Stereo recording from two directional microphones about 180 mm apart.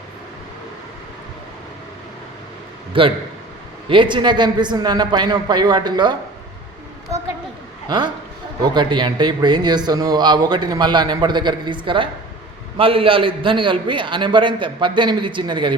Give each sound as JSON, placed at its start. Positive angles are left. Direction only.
{"t": 2.9, "sound": "a man's voice", "side_deg": -30}
{"t": 7.9, "sound": "a man's voice", "side_deg": -25}